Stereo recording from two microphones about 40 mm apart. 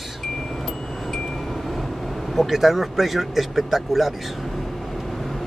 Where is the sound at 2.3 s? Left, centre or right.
Centre.